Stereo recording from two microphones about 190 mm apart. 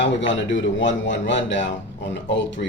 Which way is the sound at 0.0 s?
75° left (ahead or behind).